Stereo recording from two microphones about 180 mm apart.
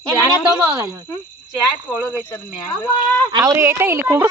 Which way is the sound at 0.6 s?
10° right (ahead or behind).